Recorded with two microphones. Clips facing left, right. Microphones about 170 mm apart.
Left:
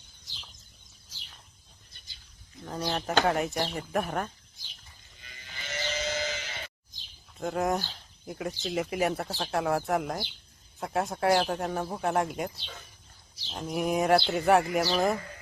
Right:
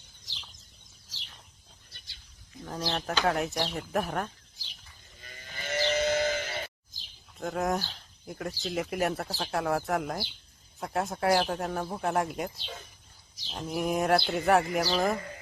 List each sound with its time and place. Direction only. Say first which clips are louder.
1.9 s a sound: right 2 dB; 80° right
2.6 s speech: left 1 dB; centre (ahead or behind)
5.2 s sheep: right 5 dB; 45° right (ahead or behind)
6.9 s bird: even; centre (ahead or behind)
8.6 s speech: left 1 dB; centre (ahead or behind)